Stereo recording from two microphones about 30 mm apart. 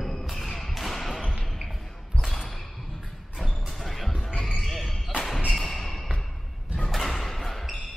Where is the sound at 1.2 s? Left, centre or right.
Left.